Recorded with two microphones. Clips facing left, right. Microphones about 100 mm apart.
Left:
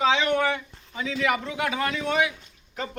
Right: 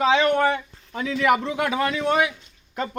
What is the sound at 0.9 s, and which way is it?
Speech, 55° right (ahead or behind).